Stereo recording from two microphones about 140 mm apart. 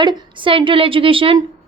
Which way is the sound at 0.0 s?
35° right (ahead or behind).